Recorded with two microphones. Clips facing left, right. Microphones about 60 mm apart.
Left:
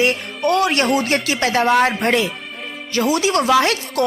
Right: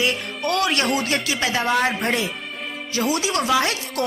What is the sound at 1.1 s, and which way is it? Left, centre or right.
A woman's voice, left.